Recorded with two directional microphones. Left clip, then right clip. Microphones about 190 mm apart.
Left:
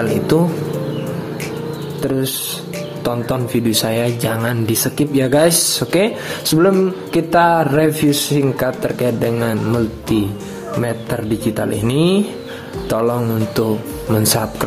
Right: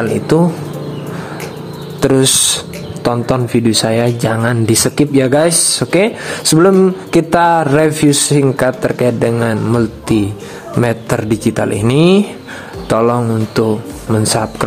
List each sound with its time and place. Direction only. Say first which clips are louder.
0.0 s speech: right 3 dB; 15° right (ahead or behind)
2.0 s a sound: right 9 dB; 30° right (ahead or behind)
3.0 s speech: right 6 dB; 20° right (ahead or behind)